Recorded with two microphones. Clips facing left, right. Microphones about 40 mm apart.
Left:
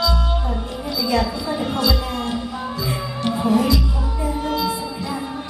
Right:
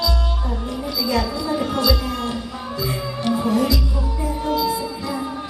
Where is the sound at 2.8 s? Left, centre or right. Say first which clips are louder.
Right 2 dB; centre.